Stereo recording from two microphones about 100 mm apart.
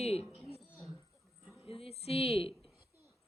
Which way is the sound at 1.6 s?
75° left (ahead or behind).